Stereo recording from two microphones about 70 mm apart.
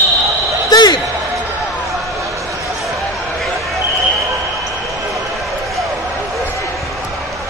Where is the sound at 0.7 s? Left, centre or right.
Left.